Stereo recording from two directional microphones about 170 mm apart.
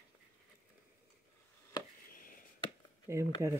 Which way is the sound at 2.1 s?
55° left (ahead or behind).